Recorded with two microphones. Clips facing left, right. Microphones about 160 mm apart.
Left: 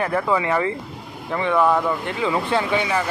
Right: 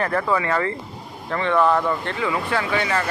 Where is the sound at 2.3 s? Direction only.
25° left (ahead or behind).